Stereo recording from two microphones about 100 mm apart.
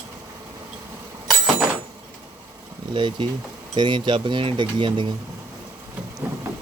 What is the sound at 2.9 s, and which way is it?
Speech, 55° right (ahead or behind).